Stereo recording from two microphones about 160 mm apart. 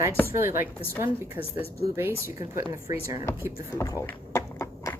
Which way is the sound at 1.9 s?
15° right (ahead or behind).